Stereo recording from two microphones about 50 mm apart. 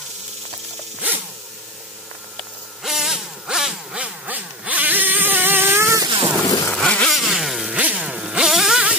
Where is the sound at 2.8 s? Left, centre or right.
Centre.